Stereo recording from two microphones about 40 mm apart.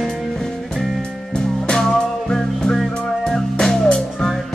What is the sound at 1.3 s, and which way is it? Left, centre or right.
Music, centre.